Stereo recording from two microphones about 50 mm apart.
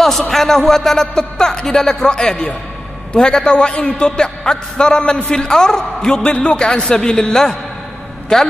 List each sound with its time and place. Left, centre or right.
0.3 s a man's voice: centre